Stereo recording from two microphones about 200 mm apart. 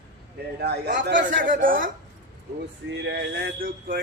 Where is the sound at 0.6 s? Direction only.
55° right (ahead or behind).